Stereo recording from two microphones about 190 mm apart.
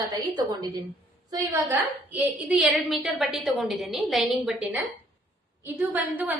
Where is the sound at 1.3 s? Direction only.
10° right (ahead or behind).